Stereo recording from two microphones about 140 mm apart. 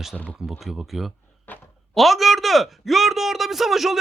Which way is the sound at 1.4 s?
15° left (ahead or behind).